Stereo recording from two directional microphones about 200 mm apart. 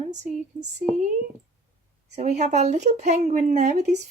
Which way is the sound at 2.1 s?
35° right (ahead or behind).